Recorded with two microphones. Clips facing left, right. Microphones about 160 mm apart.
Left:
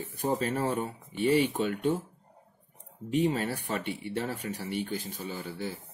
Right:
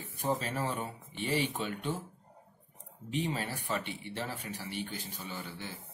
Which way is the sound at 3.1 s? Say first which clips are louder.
Left 7 dB; 45° left (ahead or behind).